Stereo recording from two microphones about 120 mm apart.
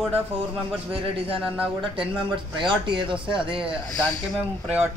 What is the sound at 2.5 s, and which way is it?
Speech, 40° right (ahead or behind).